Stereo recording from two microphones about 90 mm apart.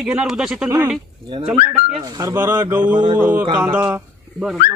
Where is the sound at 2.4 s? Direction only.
30° right (ahead or behind).